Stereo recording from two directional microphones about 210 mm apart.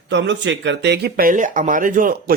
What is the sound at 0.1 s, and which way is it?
Speech, 60° right (ahead or behind).